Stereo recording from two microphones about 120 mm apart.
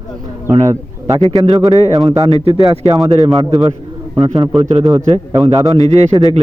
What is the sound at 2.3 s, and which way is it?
Speech, 55° right (ahead or behind).